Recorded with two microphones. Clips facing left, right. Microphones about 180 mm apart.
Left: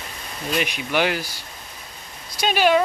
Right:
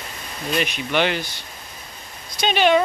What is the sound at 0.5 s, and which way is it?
Speech, 10° left (ahead or behind).